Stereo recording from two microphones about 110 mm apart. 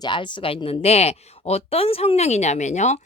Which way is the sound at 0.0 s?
45° left (ahead or behind).